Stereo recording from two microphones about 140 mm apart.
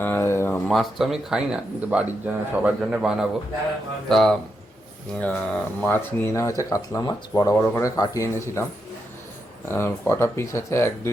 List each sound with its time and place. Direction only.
0.0 s a sound: 15° left (ahead or behind)
0.7 s speech: centre (ahead or behind); by 8.6 s 25° left (ahead or behind)
9.6 s speech: 15° left (ahead or behind)